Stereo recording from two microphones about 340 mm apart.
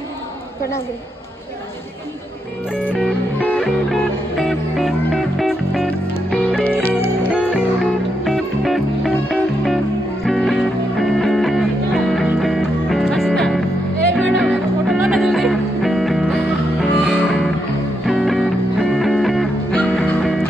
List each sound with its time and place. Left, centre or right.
2.7 s music: centre